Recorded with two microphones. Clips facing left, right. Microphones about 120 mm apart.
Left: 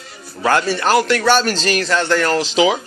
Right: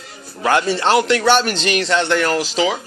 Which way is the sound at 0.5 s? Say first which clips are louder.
Even; 20° right (ahead or behind).